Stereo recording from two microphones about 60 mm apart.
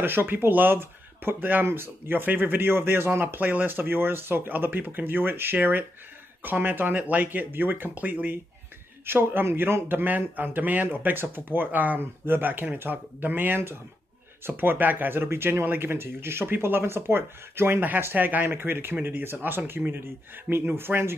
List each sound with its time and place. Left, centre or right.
0.0 s speech: right